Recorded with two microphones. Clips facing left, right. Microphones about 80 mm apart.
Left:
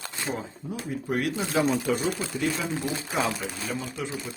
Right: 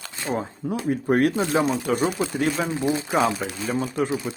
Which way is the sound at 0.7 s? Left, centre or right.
Right.